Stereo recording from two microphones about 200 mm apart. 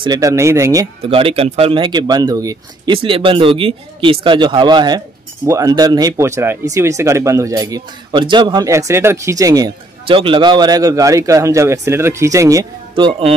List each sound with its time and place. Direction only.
0.0 s speech: 20° right (ahead or behind)
1.0 s speech: 30° right (ahead or behind)